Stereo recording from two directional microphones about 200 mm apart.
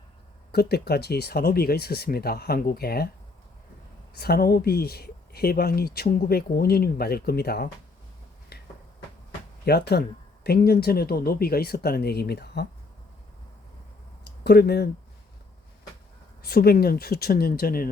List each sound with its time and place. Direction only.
0.5 s speech: 55° left (ahead or behind)
4.2 s speech: 50° left (ahead or behind)
8.5 s a sound: 55° left (ahead or behind)
9.6 s speech: 55° left (ahead or behind)
14.3 s speech: 55° left (ahead or behind)
16.4 s speech: 50° left (ahead or behind)